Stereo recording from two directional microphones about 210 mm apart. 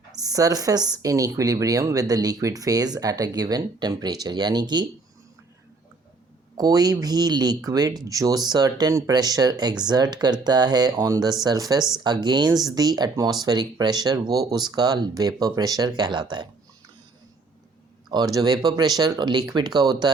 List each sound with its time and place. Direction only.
0.2 s speech: 15° right (ahead or behind)
6.6 s speech: 20° right (ahead or behind)
18.3 s speech: 20° right (ahead or behind)